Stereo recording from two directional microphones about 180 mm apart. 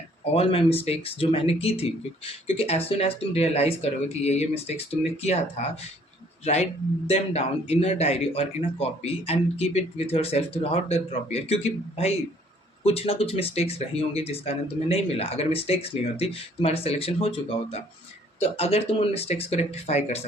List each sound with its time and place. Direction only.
0.3 s speech: 35° left (ahead or behind)
6.4 s speech: 40° left (ahead or behind)